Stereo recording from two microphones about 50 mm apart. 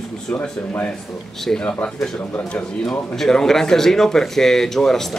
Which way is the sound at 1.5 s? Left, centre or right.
Centre.